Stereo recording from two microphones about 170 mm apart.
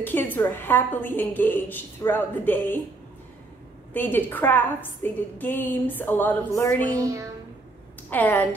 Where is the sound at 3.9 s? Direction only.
10° left (ahead or behind).